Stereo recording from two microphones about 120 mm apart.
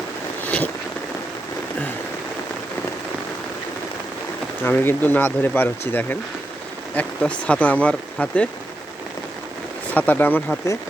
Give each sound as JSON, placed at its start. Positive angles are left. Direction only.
{"t": 4.6, "sound": "speech", "side_deg": 20}
{"t": 9.9, "sound": "speech", "side_deg": 15}